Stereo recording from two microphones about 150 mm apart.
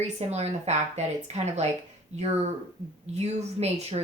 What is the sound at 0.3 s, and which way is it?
A woman's voice, 45° right (ahead or behind).